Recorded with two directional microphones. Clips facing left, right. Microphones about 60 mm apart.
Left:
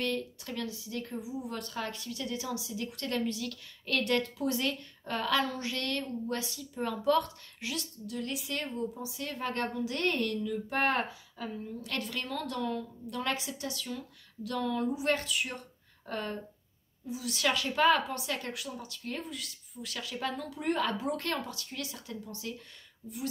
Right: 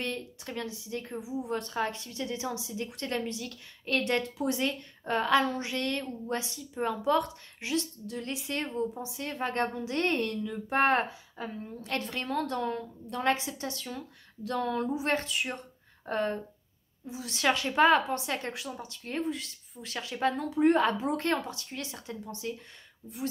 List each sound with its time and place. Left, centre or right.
0.0 s speech: right